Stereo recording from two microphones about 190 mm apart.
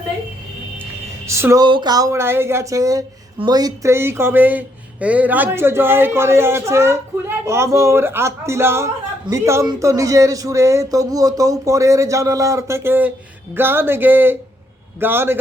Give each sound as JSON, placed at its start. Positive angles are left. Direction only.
{"t": 1.3, "sound": "speech", "side_deg": -15}